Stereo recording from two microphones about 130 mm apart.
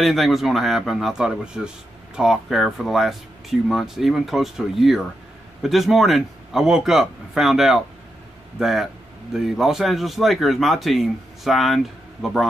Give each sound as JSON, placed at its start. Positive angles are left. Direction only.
{"t": 0.0, "sound": "speech", "side_deg": 0}